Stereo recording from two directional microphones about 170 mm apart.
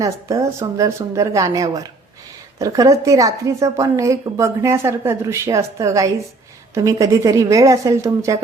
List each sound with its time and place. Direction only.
0.0 s a woman's voice: 20° right (ahead or behind)